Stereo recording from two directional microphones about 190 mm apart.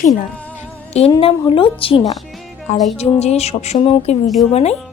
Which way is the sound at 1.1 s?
25° left (ahead or behind).